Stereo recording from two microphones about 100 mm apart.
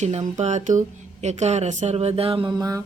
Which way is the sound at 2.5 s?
35° right (ahead or behind).